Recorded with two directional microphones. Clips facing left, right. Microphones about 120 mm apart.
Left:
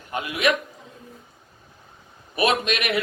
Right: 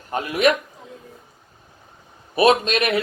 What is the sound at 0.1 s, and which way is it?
Speech, 40° right (ahead or behind).